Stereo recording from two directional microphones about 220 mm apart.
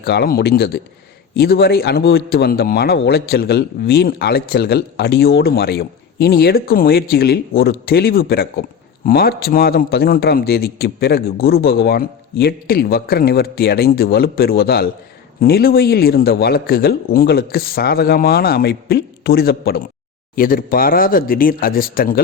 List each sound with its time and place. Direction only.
0.0 s a man's voice: 45° left (ahead or behind)